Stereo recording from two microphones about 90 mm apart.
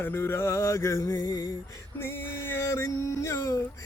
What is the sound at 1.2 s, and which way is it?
Music, 55° left (ahead or behind).